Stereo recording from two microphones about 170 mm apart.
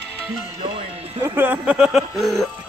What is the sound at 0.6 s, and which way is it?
Music, 30° right (ahead or behind).